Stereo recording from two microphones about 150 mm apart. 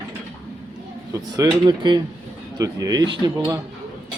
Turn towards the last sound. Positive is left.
turn(degrees=-30)  # may be behind; listen again after turning